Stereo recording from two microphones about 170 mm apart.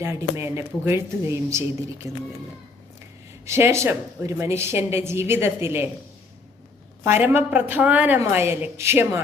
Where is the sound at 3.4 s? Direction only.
15° right (ahead or behind).